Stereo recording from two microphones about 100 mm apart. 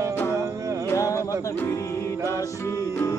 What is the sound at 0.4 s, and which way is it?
Music, 30° right (ahead or behind).